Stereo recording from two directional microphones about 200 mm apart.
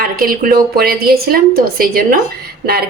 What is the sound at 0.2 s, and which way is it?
A woman's voice, 45° right (ahead or behind).